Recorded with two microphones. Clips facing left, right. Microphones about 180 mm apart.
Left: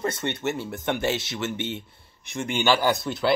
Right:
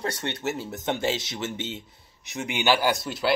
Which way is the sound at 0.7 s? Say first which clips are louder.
Even; 20° right (ahead or behind).